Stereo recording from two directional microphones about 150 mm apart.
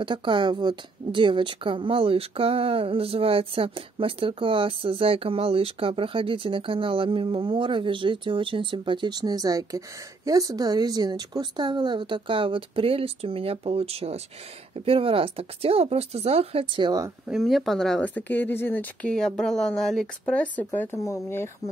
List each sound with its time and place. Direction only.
0.0 s a woman's voice: 35° right (ahead or behind)
17.3 s speech: centre (ahead or behind); by 21.5 s 15° left (ahead or behind)